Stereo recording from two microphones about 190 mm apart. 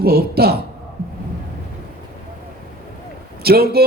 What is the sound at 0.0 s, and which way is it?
Speech, 55° right (ahead or behind).